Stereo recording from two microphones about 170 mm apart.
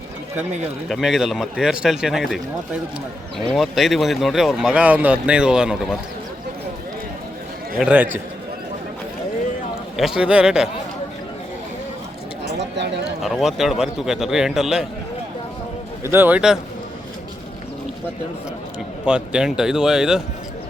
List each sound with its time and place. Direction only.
0.9 s speech: centre (ahead or behind)
7.8 s speech: 5° right (ahead or behind)
10.0 s speech: 5° right (ahead or behind)
12.5 s a sound: 90° right
13.2 s speech: centre (ahead or behind)
16.0 s speech: 10° right (ahead or behind)
19.0 s speech: 5° right (ahead or behind)